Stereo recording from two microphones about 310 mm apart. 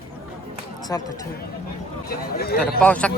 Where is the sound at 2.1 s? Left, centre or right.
Left.